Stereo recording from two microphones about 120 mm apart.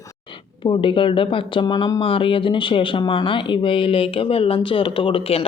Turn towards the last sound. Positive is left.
turn(degrees=50)  # may be behind; listen again after turning